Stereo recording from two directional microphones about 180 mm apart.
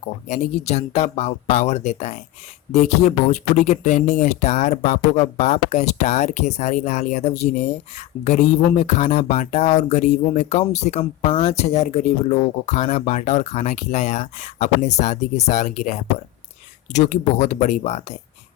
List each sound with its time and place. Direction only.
0.3 s speech: 35° left (ahead or behind)